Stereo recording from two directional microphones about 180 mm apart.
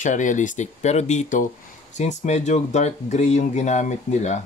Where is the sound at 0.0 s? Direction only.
45° left (ahead or behind).